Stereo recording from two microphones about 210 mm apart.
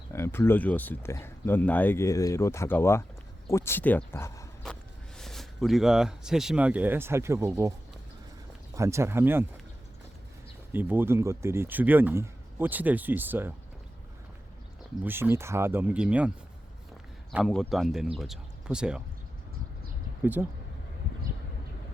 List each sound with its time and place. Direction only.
0.1 s speech: 10° left (ahead or behind); by 7.7 s 15° right (ahead or behind)
8.7 s speech: 15° right (ahead or behind)
10.7 s speech: 10° right (ahead or behind)
15.0 s speech: 10° right (ahead or behind)
17.3 s speech: centre (ahead or behind)
20.2 s speech: 10° right (ahead or behind)